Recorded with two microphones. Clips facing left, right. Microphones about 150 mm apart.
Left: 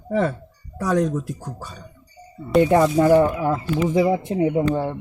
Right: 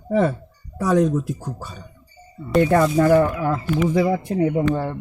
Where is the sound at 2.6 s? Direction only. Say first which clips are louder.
Left 1 dB; 15° left (ahead or behind).